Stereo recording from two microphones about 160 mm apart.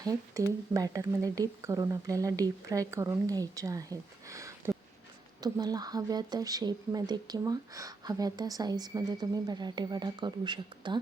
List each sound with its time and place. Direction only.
0.0 s speech: 20° right (ahead or behind)